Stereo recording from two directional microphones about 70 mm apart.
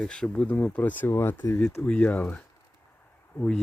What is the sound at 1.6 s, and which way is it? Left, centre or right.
Speech, centre.